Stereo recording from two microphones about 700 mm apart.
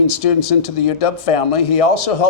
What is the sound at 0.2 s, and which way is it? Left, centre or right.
A man's voice, left.